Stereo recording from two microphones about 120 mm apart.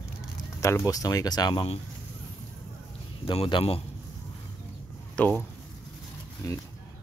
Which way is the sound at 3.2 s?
45° left (ahead or behind).